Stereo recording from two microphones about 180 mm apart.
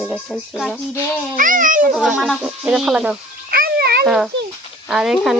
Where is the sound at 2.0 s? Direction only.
5° right (ahead or behind).